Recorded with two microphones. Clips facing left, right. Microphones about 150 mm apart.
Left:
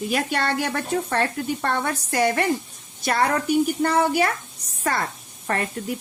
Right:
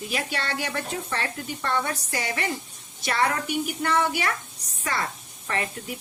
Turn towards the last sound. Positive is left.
turn(degrees=50)  # may be behind; listen again after turning